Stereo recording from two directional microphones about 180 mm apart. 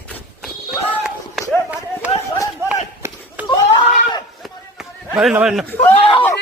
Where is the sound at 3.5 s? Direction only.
25° left (ahead or behind).